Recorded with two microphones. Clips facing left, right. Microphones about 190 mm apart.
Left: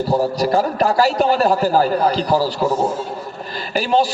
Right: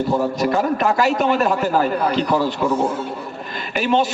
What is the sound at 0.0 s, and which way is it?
A man's voice, 35° left (ahead or behind).